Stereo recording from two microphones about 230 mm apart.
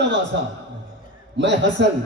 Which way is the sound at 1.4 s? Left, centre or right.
Right.